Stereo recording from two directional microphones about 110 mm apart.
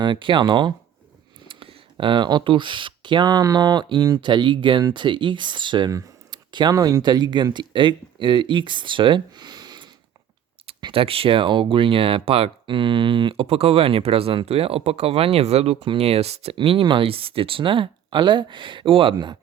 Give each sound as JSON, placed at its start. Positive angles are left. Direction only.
{"t": 0.0, "sound": "speech", "side_deg": -45}
{"t": 5.9, "sound": "speech", "side_deg": -30}
{"t": 10.9, "sound": "speech", "side_deg": -60}
{"t": 16.6, "sound": "speech", "side_deg": -50}